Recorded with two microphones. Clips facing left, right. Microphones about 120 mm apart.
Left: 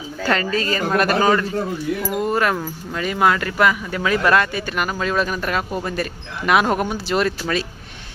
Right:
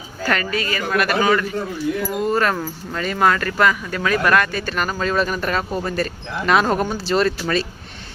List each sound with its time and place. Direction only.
0.5 s a man's voice: 35° left (ahead or behind)
2.0 s speech: 15° left (ahead or behind)